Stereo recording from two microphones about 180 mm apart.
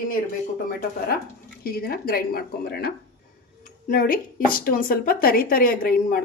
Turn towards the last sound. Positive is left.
turn(degrees=55)  # may be behind; listen again after turning